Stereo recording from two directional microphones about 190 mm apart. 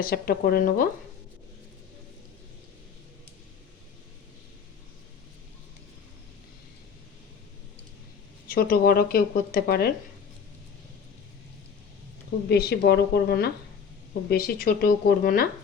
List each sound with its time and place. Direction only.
0.0 s speech: 50° left (ahead or behind)
8.4 s speech: 50° left (ahead or behind)
12.5 s a woman's voice: 55° left (ahead or behind)